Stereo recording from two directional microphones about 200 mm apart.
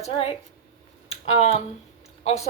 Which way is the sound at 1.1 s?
30° left (ahead or behind).